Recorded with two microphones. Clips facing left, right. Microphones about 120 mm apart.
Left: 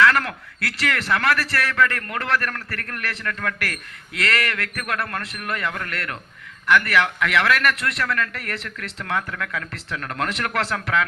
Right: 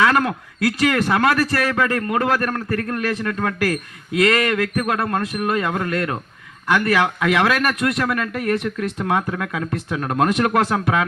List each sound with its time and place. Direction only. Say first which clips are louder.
0.0 s a man's voice: right 2 dB; 20° right (ahead or behind)